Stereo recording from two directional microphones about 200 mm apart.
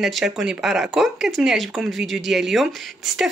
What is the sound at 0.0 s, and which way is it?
Speech, centre (ahead or behind).